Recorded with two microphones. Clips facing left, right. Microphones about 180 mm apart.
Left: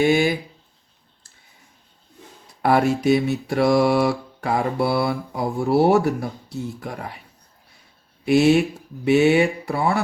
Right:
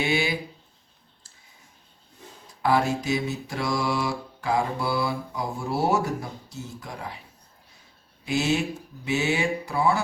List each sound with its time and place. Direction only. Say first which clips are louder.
0.0 s speech: left 8 dB; 50° left (ahead or behind)
2.6 s mantra: left 5 dB; 65° left (ahead or behind)
8.2 s speech: left 9 dB; 65° left (ahead or behind)
9.0 s mantra: left 9 dB; 60° left (ahead or behind)